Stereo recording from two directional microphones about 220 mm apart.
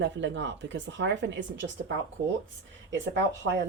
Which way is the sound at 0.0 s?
55° right (ahead or behind).